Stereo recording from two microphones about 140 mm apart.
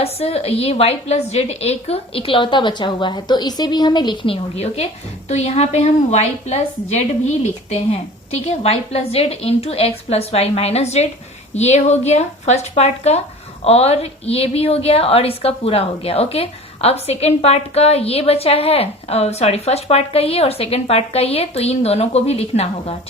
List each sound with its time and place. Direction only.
0.0 s a woman's voice: 45° left (ahead or behind)